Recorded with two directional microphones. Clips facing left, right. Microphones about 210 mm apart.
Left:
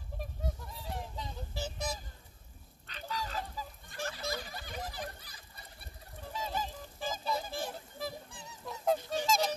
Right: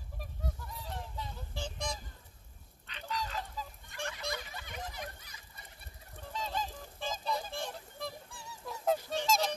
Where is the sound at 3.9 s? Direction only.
35° left (ahead or behind).